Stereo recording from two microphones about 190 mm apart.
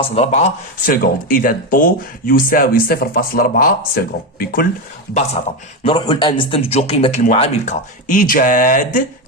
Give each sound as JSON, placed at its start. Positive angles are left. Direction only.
{"t": 0.0, "sound": "speech", "side_deg": 35}
{"t": 5.8, "sound": "a man's voice", "side_deg": 25}